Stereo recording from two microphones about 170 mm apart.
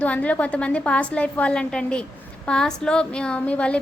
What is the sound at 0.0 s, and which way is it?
A woman's voice, 10° left (ahead or behind).